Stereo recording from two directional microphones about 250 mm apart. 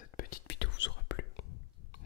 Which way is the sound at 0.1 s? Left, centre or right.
Left.